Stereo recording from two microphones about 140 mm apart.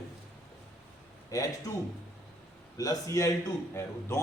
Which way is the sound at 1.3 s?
25° left (ahead or behind).